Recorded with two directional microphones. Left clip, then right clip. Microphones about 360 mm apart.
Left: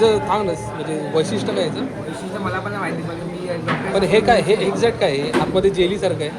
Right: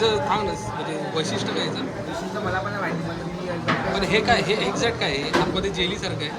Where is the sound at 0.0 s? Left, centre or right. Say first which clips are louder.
Left 5 dB; centre.